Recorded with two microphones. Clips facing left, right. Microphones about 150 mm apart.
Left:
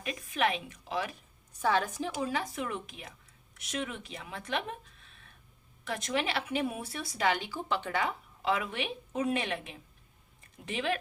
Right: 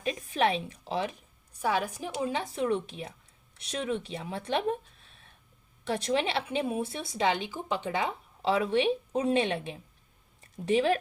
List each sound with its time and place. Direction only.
0.0 s a woman's voice: 30° right (ahead or behind)
1.6 s a woman's voice: 10° right (ahead or behind)
2.2 s speech: 25° right (ahead or behind)